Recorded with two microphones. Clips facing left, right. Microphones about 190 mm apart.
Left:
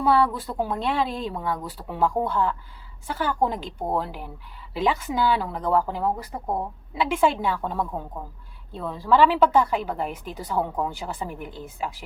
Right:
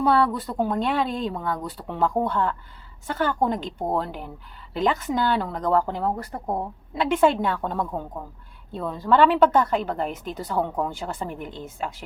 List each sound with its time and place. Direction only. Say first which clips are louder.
0.0 s a woman's voice: even; 5° left (ahead or behind)